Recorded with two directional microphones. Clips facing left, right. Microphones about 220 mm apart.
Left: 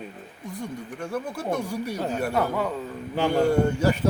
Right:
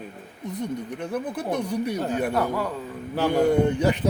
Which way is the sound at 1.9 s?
Centre (ahead or behind).